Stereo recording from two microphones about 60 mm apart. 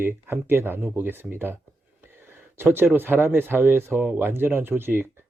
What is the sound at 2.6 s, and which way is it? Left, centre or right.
A man's voice, right.